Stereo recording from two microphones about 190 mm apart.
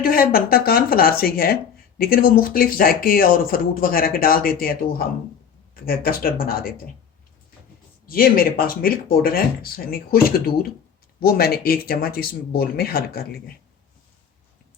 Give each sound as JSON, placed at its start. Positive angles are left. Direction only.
{"t": 0.0, "sound": "speech", "side_deg": 50}
{"t": 8.0, "sound": "speech", "side_deg": 50}